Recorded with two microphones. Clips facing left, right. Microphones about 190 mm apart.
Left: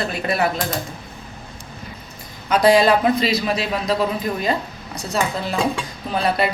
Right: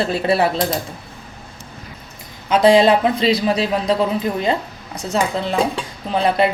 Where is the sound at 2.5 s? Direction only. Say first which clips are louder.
Right 2 dB; 25° right (ahead or behind).